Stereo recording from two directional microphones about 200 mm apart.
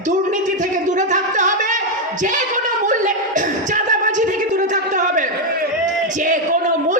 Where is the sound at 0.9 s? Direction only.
40° right (ahead or behind).